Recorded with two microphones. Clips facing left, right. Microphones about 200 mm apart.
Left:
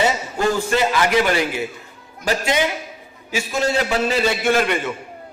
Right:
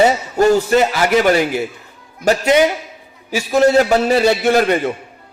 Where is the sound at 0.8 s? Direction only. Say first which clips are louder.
Right 4 dB; 45° right (ahead or behind).